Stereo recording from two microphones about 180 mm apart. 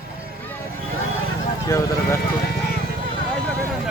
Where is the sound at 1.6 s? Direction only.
15° left (ahead or behind).